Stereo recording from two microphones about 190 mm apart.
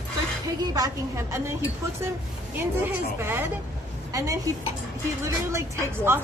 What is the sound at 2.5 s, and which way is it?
A woman's voice, 10° right (ahead or behind).